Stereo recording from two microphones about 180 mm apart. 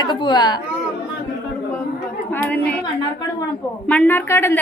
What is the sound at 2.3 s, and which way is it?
Speech, 10° left (ahead or behind).